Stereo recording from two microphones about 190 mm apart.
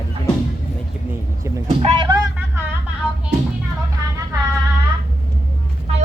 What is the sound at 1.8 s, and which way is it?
Speech, 30° right (ahead or behind).